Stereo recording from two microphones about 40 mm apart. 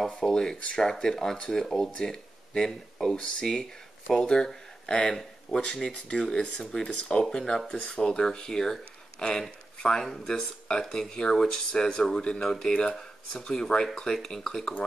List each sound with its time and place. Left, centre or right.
0.1 s speech: centre
7.2 s speech: centre